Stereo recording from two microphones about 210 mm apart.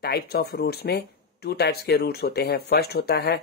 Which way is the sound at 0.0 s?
50° left (ahead or behind).